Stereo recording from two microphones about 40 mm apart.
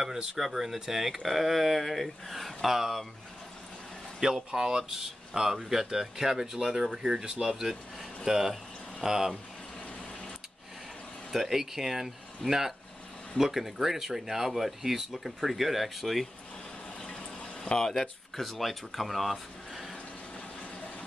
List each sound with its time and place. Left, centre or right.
0.0 s speech: centre
4.2 s speech: centre
11.3 s speech: centre
17.0 s water: centre
18.3 s speech: centre